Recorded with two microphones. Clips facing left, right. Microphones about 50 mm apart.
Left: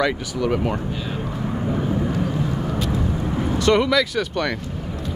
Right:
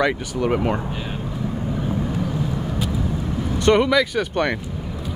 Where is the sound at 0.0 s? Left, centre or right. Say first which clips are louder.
Right 1 dB; right.